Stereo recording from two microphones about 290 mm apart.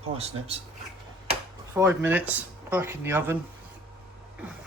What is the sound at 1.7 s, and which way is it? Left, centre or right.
Speech, centre.